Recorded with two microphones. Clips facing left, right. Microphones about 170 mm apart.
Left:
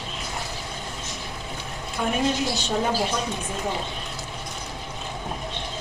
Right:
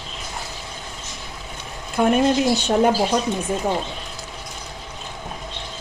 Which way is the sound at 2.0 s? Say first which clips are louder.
Right 9 dB; 60° right (ahead or behind).